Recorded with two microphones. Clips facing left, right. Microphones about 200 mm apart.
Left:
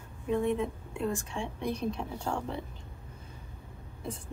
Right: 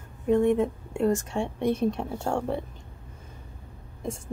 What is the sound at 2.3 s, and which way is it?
Speech, 70° right (ahead or behind).